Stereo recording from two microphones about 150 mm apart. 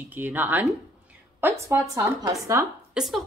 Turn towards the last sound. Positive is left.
turn(degrees=0)  # may be behind; listen again after turning